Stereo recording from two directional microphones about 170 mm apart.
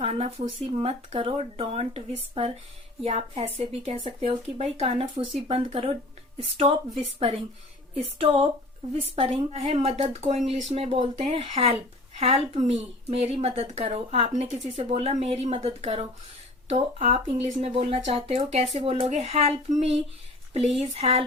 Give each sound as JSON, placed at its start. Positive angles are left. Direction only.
{"t": 0.0, "sound": "speech", "side_deg": -35}